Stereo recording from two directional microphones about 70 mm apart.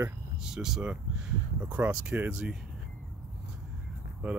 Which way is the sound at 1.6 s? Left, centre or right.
Right.